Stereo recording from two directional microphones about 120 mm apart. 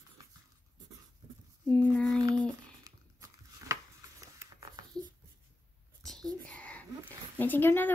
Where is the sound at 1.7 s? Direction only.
10° left (ahead or behind).